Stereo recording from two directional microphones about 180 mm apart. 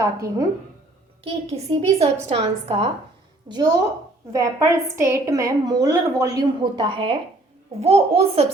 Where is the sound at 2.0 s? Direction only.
35° right (ahead or behind).